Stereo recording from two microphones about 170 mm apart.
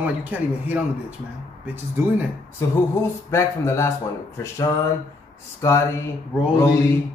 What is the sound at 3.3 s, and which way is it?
Speech, 15° left (ahead or behind).